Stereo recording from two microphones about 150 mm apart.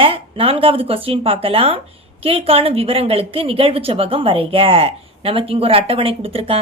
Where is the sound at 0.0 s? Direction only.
40° right (ahead or behind).